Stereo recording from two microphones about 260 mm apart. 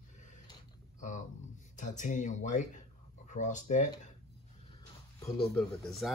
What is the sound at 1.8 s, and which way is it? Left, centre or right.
Speech, left.